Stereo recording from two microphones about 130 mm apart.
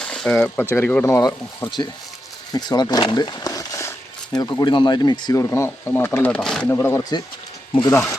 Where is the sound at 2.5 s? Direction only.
35° left (ahead or behind).